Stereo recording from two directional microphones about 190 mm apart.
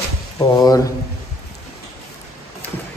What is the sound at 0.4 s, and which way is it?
Speech, 25° left (ahead or behind).